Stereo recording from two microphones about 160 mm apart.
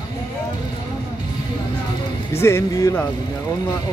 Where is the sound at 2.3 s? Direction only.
15° left (ahead or behind).